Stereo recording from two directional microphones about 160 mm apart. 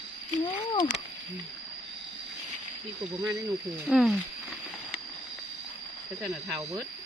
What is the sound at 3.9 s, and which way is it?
Speech, centre (ahead or behind).